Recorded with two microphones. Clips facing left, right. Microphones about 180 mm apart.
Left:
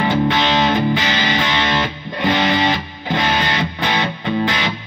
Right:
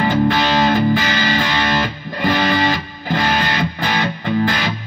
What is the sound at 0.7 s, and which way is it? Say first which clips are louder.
Music: right 2 dB; 20° left (ahead or behind).